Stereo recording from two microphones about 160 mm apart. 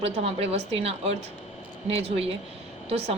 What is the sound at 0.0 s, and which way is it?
A woman's voice, 40° right (ahead or behind).